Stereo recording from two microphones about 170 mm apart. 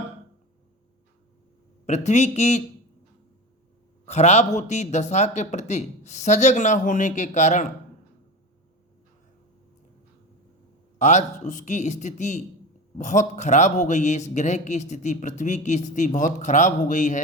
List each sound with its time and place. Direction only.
1.9 s a man's voice: 40° left (ahead or behind)
4.0 s a man's voice: 40° left (ahead or behind)
10.9 s a man's voice: 45° left (ahead or behind)